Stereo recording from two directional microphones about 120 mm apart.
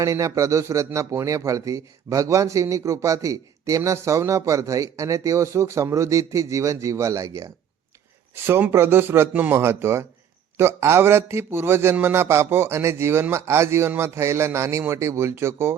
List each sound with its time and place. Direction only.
0.0 s speech: 25° right (ahead or behind)